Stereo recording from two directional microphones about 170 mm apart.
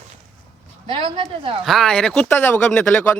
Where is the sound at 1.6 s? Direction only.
Centre (ahead or behind).